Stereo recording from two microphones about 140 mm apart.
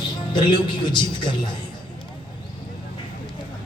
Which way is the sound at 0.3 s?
35° left (ahead or behind).